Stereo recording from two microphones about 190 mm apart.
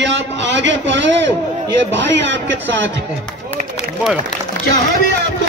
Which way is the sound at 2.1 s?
70° right (ahead or behind).